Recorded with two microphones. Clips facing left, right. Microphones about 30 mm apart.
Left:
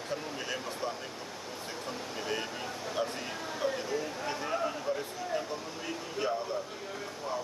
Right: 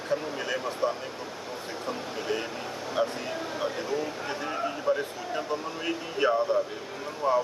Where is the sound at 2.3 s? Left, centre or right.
Centre.